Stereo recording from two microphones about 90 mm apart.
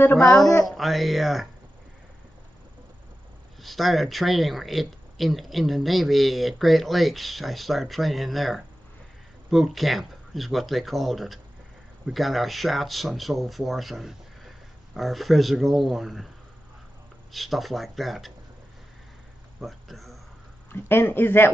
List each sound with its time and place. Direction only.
0.7 s speech: centre (ahead or behind)
3.6 s speech: centre (ahead or behind)
17.3 s speech: centre (ahead or behind)
19.6 s speech: centre (ahead or behind)
20.7 s speech: 25° left (ahead or behind)